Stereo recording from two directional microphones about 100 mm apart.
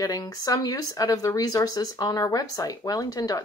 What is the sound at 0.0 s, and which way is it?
Speech, 40° left (ahead or behind).